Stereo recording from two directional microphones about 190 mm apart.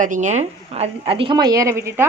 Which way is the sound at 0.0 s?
40° right (ahead or behind).